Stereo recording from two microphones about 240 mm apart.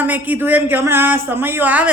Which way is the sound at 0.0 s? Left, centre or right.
Centre.